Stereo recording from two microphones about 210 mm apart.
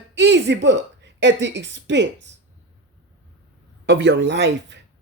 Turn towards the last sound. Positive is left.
turn(degrees=-55)  # may be behind; listen again after turning